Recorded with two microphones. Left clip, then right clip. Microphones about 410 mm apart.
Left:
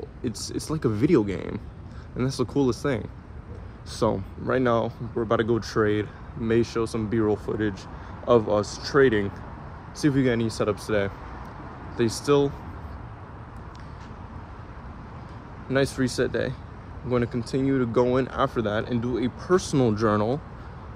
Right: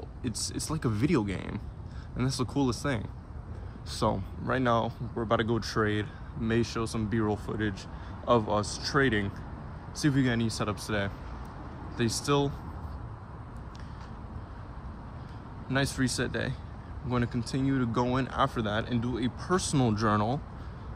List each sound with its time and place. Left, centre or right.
0.2 s speech: centre
4.0 s speech: left
4.5 s speech: centre
15.7 s speech: centre